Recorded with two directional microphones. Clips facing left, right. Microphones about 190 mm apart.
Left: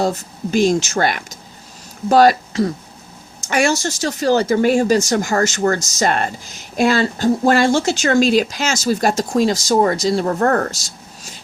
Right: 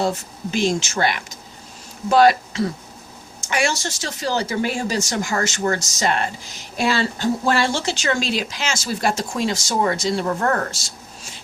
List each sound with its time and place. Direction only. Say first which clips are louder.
0.5 s speech: left 6 dB; 45° left (ahead or behind)